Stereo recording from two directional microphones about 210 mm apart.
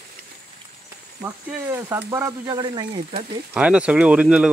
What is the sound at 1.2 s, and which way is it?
Speech, 10° right (ahead or behind).